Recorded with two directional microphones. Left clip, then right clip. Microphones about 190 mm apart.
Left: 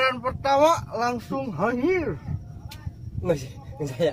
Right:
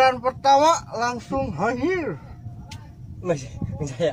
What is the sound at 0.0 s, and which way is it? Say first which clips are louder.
Speech: right 6 dB; 40° right (ahead or behind).